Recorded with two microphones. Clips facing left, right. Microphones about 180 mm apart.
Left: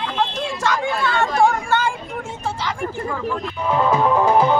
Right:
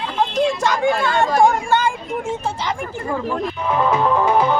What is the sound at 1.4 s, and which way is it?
Speech, 15° right (ahead or behind).